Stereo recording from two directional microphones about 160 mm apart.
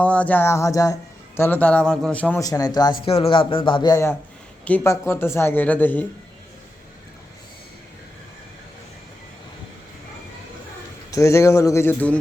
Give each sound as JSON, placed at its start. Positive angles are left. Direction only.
{"t": 0.0, "sound": "speech", "side_deg": 10}
{"t": 2.4, "sound": "speech", "side_deg": 20}
{"t": 3.1, "sound": "speech", "side_deg": 35}
{"t": 4.6, "sound": "speech", "side_deg": 10}
{"t": 11.1, "sound": "speech", "side_deg": 20}